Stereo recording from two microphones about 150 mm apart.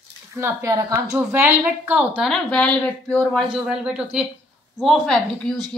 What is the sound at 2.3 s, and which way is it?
A woman's voice, 5° left (ahead or behind).